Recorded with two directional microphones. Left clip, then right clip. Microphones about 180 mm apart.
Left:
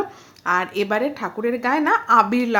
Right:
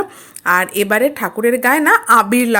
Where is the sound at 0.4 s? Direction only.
20° right (ahead or behind).